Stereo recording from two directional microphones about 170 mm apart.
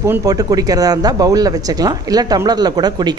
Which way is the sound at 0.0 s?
20° right (ahead or behind).